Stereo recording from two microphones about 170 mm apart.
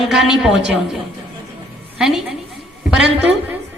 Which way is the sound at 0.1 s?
Centre (ahead or behind).